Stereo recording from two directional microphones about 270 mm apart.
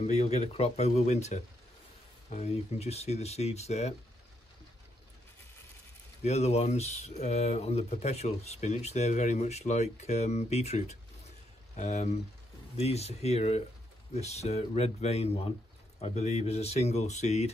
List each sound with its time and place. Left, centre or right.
0.0 s speech: left
6.2 s speech: left